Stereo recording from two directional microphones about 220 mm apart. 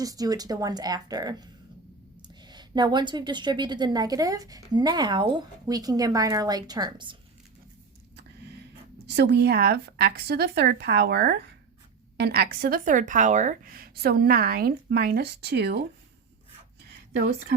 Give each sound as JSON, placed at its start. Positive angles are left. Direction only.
{"t": 0.0, "sound": "speech", "side_deg": -15}
{"t": 2.5, "sound": "a woman's voice", "side_deg": -20}
{"t": 9.0, "sound": "a woman's voice", "side_deg": -50}
{"t": 17.2, "sound": "a woman's voice", "side_deg": -45}